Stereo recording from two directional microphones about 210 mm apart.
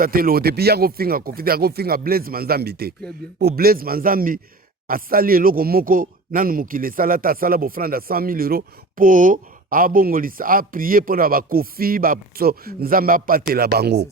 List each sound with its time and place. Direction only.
0.0 s a man's voice: 45° right (ahead or behind)